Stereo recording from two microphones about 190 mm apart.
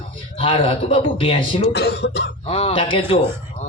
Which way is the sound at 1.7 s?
60° left (ahead or behind).